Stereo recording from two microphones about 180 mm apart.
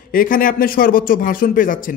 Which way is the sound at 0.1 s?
50° left (ahead or behind).